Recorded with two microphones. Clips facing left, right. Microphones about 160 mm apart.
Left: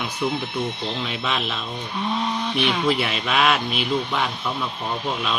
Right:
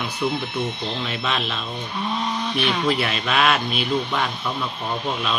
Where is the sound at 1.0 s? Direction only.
10° left (ahead or behind).